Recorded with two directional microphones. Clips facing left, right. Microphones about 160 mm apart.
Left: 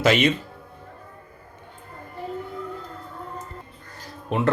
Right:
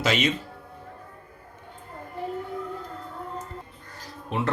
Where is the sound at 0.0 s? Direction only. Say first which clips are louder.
Left 5 dB; 55° left (ahead or behind).